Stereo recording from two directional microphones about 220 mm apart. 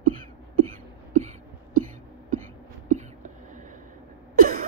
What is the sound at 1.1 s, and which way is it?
Cough, 35° right (ahead or behind).